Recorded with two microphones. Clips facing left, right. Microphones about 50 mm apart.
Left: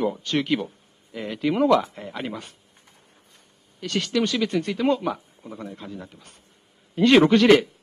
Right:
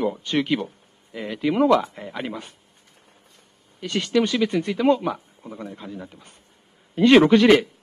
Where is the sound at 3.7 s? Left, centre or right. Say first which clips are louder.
Right 3 dB; centre.